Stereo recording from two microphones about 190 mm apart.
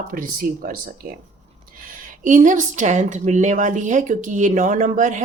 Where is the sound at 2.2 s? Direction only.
45° right (ahead or behind).